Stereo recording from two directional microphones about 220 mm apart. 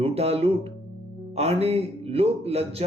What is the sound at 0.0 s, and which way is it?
Speech, 25° right (ahead or behind).